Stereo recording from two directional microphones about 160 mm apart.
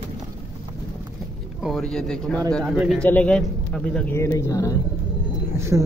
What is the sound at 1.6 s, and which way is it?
A man's voice, centre (ahead or behind).